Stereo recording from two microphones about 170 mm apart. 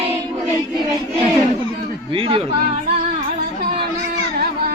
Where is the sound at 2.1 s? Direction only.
30° right (ahead or behind).